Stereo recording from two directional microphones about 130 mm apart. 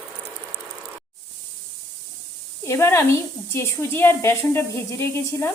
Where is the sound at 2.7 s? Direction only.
20° left (ahead or behind).